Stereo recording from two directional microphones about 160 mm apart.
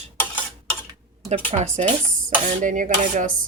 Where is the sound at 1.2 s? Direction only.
45° right (ahead or behind).